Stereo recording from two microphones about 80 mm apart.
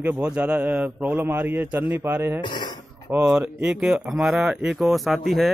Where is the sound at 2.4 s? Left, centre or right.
Left.